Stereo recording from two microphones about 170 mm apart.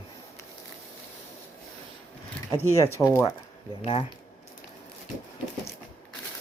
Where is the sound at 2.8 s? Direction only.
15° left (ahead or behind).